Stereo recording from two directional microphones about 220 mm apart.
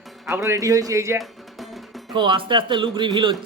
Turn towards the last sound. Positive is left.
turn(degrees=-20)  # may be behind; listen again after turning